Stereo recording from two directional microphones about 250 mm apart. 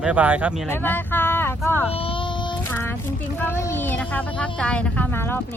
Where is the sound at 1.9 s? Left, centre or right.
Left.